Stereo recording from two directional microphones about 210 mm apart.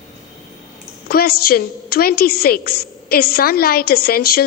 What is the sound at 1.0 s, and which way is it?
A woman's voice, 45° left (ahead or behind).